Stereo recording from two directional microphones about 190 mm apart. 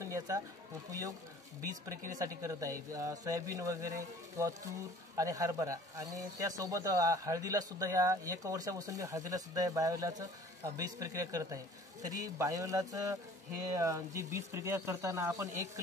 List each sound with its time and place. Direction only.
0.0 s pigeon: 15° right (ahead or behind)
0.8 s speech: 20° right (ahead or behind)
5.1 s speech: 15° right (ahead or behind)